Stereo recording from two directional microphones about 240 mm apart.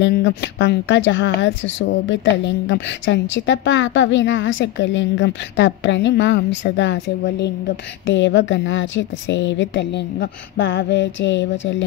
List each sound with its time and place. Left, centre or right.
0.0 s a woman's voice: left